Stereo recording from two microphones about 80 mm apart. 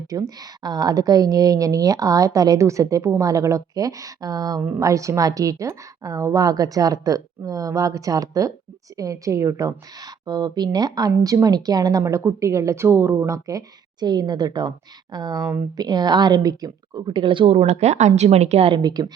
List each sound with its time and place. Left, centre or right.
0.1 s a woman's voice: right
11.2 s a woman's voice: right
18.7 s a woman's voice: right